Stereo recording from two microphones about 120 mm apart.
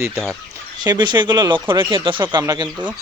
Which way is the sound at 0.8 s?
35° right (ahead or behind).